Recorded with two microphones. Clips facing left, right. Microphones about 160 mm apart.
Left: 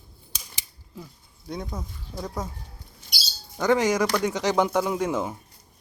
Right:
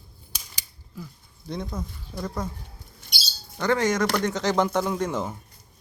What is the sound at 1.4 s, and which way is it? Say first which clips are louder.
Speech: right 1 dB; 5° left (ahead or behind).